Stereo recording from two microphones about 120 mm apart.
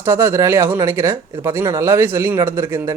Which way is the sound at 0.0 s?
20° right (ahead or behind).